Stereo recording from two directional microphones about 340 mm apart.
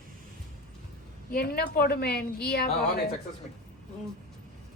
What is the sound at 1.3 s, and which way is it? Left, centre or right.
A woman's voice, left.